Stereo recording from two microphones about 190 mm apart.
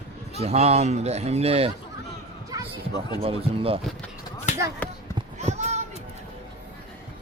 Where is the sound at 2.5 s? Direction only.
20° right (ahead or behind).